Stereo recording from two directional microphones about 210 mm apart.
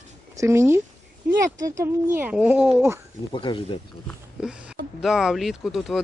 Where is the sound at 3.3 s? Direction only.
25° left (ahead or behind).